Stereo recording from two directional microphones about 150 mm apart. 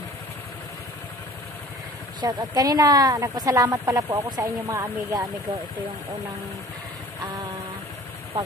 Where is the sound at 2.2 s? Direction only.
25° right (ahead or behind).